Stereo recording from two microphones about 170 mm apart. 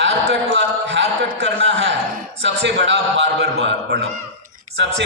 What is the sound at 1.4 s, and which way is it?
Speech, 90° right.